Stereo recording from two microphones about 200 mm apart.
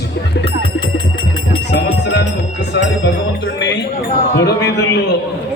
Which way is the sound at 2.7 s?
65° left (ahead or behind).